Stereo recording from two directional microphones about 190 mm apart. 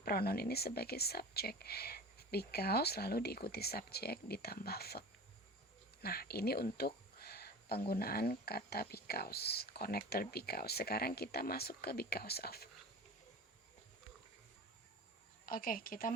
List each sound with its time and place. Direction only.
0.0 s speech: 55° left (ahead or behind)
15.4 s a woman's voice: 50° left (ahead or behind)